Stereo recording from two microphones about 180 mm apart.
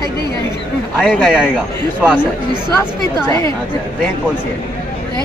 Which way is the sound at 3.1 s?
15° left (ahead or behind).